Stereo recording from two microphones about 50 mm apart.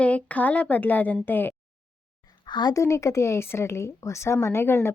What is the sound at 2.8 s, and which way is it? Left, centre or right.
A woman's voice, left.